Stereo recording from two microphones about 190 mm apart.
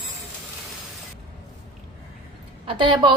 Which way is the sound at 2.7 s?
25° right (ahead or behind).